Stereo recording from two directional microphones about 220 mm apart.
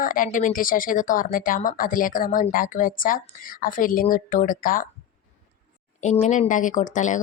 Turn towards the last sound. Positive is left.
turn(degrees=35)  # may be behind; listen again after turning